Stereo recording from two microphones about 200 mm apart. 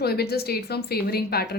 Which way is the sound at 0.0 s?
50° left (ahead or behind).